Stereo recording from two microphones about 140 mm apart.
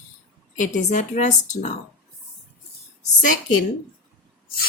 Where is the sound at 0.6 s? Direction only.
65° left (ahead or behind).